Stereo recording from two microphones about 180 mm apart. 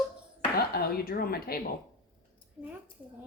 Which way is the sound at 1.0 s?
55° left (ahead or behind).